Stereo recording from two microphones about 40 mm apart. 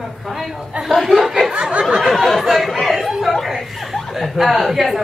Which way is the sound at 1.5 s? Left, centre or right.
Right.